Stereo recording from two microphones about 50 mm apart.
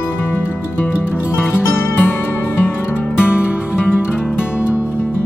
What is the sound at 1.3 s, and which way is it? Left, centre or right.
Music, left.